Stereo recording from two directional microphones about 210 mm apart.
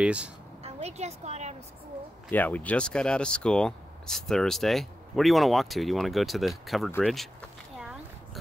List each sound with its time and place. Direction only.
0.0 s a woman's voice: 5° right (ahead or behind)
0.7 s a woman's voice: 30° right (ahead or behind)
2.3 s speech: 10° left (ahead or behind)